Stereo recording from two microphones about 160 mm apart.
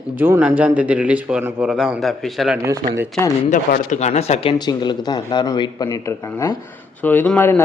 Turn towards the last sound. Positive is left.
turn(degrees=10)  # may be behind; listen again after turning